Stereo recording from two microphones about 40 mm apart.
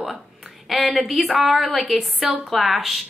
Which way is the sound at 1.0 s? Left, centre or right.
Centre.